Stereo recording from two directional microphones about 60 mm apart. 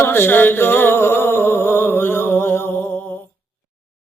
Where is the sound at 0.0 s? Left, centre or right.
Left.